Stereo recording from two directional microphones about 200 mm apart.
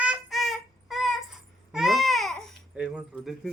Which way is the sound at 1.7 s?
Centre (ahead or behind).